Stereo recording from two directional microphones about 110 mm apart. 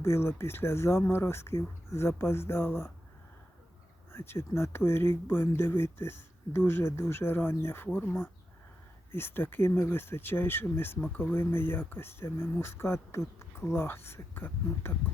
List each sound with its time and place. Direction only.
0.0 s speech: 25° left (ahead or behind)
4.1 s speech: 20° left (ahead or behind)